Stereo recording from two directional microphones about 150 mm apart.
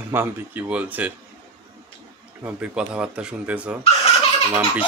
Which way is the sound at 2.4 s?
10° right (ahead or behind).